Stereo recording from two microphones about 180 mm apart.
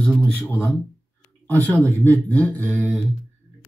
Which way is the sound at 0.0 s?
10° left (ahead or behind).